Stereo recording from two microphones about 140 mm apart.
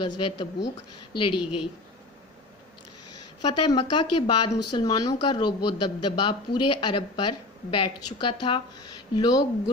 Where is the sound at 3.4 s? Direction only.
30° left (ahead or behind).